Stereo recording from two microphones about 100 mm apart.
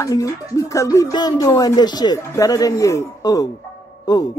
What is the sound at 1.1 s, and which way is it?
Speech, 40° left (ahead or behind).